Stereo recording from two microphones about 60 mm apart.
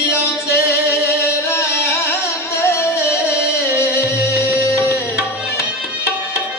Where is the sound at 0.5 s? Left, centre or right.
Left.